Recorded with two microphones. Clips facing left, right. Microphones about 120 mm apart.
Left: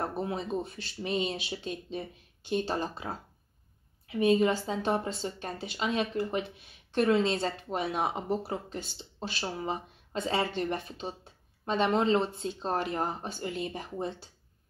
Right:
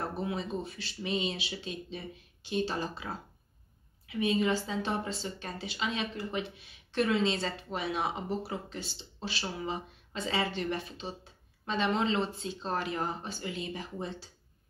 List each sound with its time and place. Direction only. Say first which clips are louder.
0.2 s speech: left 2 dB; 45° left (ahead or behind)
4.1 s speech: left 4 dB; 45° left (ahead or behind)